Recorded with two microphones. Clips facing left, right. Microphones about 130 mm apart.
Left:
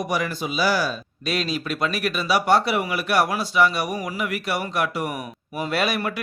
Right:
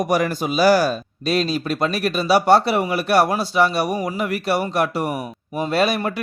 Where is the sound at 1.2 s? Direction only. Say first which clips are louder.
Right 5 dB; 35° right (ahead or behind).